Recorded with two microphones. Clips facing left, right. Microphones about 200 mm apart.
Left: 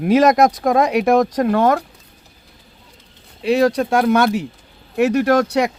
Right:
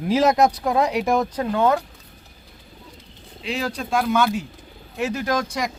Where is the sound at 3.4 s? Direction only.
65° left (ahead or behind).